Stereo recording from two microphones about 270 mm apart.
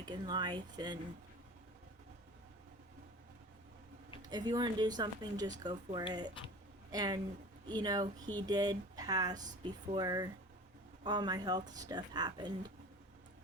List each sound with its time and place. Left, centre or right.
0.0 s speech: centre
4.3 s speech: centre